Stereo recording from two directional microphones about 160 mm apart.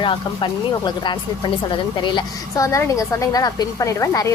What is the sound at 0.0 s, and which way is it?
Speech, 30° left (ahead or behind).